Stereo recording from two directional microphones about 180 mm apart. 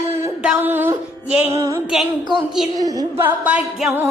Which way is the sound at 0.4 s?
10° right (ahead or behind).